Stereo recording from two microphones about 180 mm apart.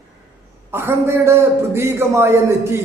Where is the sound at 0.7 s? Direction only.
15° right (ahead or behind).